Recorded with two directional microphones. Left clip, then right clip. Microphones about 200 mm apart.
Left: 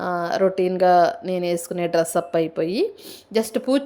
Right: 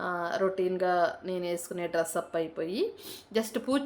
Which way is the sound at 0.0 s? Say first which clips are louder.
Left 9 dB; 30° left (ahead or behind).